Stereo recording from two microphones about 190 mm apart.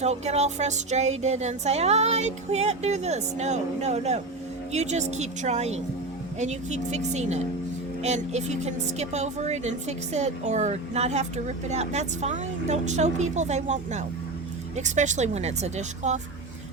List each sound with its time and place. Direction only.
0.0 s a woman's voice: 35° right (ahead or behind)